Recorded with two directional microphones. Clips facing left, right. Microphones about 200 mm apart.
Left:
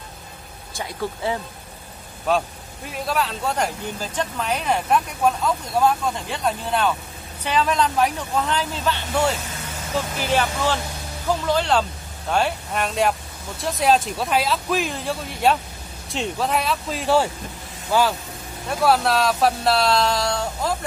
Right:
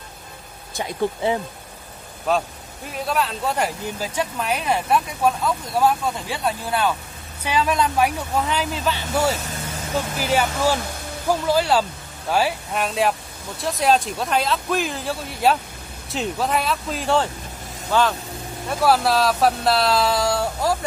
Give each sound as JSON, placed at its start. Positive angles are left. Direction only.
{"t": 0.7, "sound": "speech", "side_deg": -20}
{"t": 2.3, "sound": "speech", "side_deg": 0}
{"t": 18.7, "sound": "speech", "side_deg": 0}